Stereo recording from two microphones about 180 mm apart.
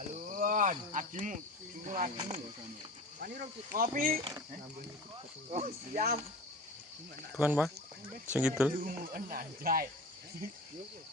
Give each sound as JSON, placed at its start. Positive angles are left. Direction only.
{"t": 0.1, "sound": "a sound", "side_deg": -45}
{"t": 1.8, "sound": "speech", "side_deg": -45}
{"t": 3.2, "sound": "speech", "side_deg": -55}
{"t": 4.2, "sound": "speech", "side_deg": -20}
{"t": 5.5, "sound": "speech", "side_deg": -40}
{"t": 7.3, "sound": "speech", "side_deg": -5}
{"t": 8.7, "sound": "speech", "side_deg": -50}